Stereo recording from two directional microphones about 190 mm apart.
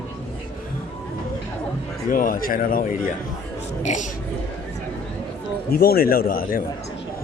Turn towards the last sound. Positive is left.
turn(degrees=50)  # may be behind; listen again after turning